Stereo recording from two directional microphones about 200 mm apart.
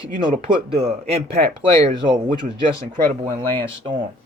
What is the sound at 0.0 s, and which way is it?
Speech, 25° right (ahead or behind).